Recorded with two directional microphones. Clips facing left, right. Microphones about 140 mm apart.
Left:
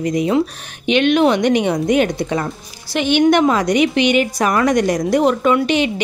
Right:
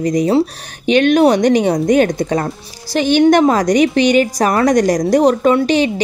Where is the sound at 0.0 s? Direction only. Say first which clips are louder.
Right 3 dB; 40° right (ahead or behind).